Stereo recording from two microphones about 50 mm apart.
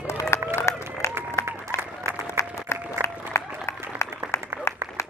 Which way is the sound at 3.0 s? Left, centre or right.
Left.